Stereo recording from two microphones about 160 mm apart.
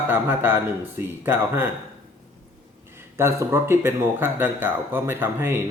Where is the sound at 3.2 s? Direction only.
15° right (ahead or behind).